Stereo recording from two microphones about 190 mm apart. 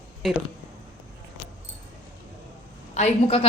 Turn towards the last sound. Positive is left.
turn(degrees=35)  # may be behind; listen again after turning